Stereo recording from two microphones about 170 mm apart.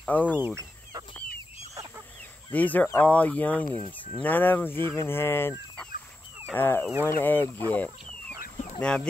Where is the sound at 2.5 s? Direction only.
10° left (ahead or behind).